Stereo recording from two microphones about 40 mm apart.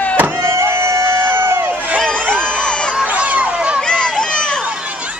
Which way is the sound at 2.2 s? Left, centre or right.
Left.